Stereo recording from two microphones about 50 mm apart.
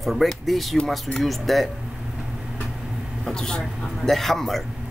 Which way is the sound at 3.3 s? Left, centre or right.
Centre.